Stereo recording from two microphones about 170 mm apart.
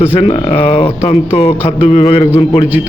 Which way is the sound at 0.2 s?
35° left (ahead or behind).